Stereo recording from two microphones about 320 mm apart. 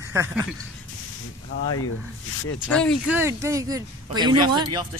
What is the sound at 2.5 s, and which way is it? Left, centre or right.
Speech, centre.